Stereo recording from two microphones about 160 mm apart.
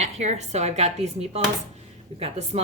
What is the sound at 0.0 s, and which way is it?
A woman's voice, 45° right (ahead or behind).